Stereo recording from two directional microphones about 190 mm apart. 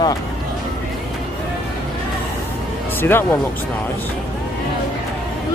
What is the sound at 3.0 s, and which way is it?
Speech, 10° left (ahead or behind).